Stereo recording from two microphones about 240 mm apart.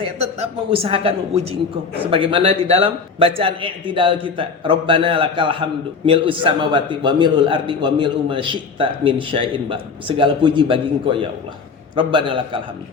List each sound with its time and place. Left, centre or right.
0.0 s a man's voice: right